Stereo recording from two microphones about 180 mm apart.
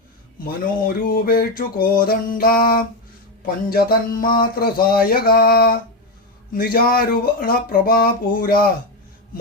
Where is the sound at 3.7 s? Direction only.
55° left (ahead or behind).